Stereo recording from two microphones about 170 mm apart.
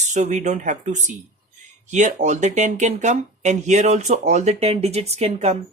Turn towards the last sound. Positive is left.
turn(degrees=-40)  # may be behind; listen again after turning